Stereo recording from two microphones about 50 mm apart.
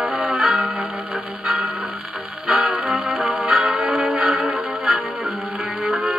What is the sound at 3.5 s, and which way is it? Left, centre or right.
Music, right.